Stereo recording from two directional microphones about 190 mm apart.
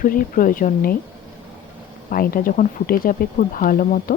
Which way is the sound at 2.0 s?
50° left (ahead or behind).